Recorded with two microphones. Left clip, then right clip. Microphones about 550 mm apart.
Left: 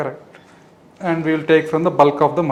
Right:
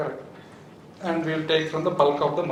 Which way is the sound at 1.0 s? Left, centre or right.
Left.